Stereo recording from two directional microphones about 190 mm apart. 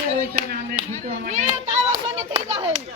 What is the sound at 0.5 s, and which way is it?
Speech, 55° right (ahead or behind).